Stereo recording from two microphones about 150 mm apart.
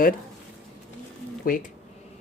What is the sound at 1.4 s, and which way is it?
Speech, 70° left (ahead or behind).